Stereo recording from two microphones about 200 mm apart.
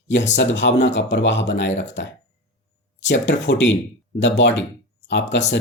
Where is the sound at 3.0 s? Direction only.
65° left (ahead or behind).